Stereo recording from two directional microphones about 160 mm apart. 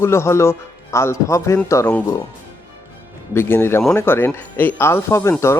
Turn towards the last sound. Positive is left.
turn(degrees=15)  # may be behind; listen again after turning